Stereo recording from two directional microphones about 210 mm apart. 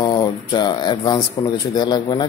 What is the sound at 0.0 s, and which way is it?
Speech, 20° left (ahead or behind).